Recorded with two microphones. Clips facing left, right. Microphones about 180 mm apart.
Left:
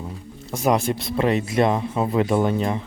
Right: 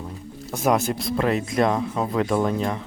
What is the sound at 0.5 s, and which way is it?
Speech, centre (ahead or behind).